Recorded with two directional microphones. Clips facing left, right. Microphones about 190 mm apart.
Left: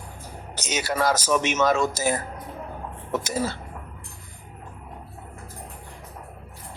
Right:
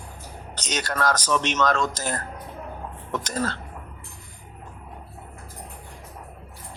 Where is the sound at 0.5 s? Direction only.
10° left (ahead or behind).